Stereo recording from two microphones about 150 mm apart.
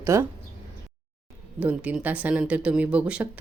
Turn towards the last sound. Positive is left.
turn(degrees=-10)  # may be behind; listen again after turning